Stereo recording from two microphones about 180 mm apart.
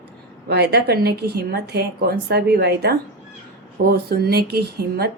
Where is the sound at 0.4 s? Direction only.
65° right (ahead or behind).